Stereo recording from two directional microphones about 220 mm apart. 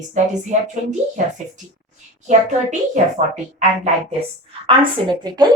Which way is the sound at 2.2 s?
35° right (ahead or behind).